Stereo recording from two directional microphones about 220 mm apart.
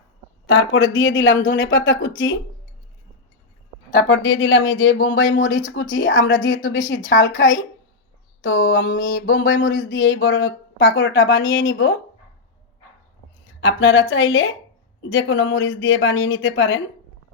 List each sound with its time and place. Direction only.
0.4 s speech: 60° left (ahead or behind)
3.9 s speech: 55° left (ahead or behind)
13.7 s speech: 65° left (ahead or behind)